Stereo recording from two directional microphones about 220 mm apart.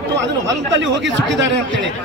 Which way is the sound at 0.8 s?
55° right (ahead or behind).